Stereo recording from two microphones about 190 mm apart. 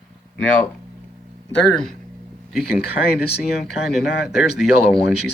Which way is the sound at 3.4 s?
Centre (ahead or behind).